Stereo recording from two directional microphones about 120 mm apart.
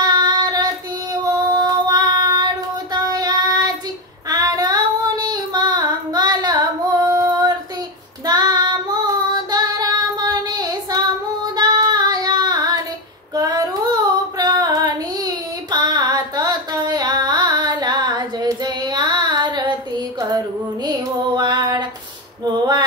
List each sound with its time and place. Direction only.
0.0 s child singing: 35° right (ahead or behind)
13.3 s female singing: 35° right (ahead or behind)
14.4 s child singing: 35° right (ahead or behind)
21.4 s female singing: 35° right (ahead or behind)
22.4 s a sound: 40° right (ahead or behind)